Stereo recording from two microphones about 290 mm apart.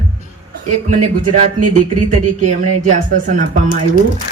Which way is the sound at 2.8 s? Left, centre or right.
Right.